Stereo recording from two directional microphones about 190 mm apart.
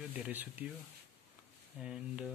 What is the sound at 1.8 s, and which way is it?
Speech, 5° right (ahead or behind).